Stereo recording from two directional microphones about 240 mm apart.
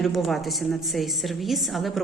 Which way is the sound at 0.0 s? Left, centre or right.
Centre.